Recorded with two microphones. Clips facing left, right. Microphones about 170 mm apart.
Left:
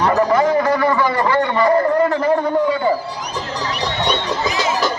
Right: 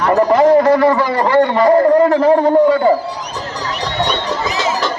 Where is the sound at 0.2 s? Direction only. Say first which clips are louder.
Right 5 dB; 35° right (ahead or behind).